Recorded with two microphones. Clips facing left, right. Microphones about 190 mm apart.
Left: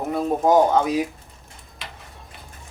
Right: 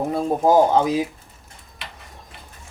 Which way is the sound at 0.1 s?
30° right (ahead or behind).